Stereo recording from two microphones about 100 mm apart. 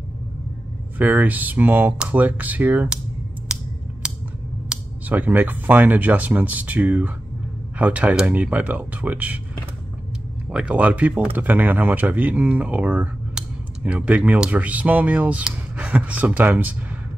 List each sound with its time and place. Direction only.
0.9 s speech: 15° right (ahead or behind)
3.5 s a sound: 10° right (ahead or behind)
4.6 s speech: 15° right (ahead or behind)
10.5 s speech: 10° right (ahead or behind)